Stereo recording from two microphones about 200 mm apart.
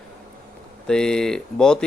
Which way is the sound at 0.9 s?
5° left (ahead or behind).